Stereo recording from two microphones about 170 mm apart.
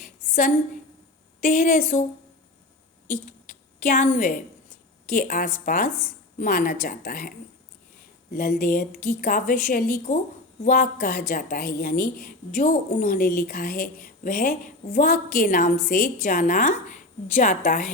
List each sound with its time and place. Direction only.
1.4 s a woman's voice: 55° left (ahead or behind)
3.8 s a woman's voice: 45° left (ahead or behind)